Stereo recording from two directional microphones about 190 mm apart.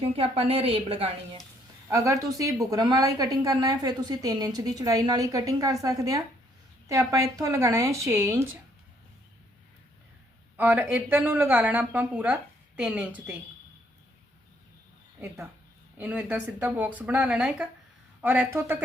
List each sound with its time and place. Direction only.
0.0 s a woman's voice: 30° right (ahead or behind)
1.9 s speech: 15° right (ahead or behind)
10.6 s speech: 10° right (ahead or behind)
16.0 s speech: 10° right (ahead or behind)